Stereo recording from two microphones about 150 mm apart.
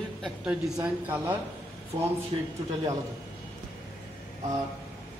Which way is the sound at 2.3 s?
30° right (ahead or behind).